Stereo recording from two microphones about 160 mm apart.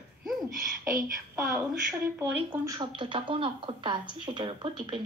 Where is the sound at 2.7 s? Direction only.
30° right (ahead or behind).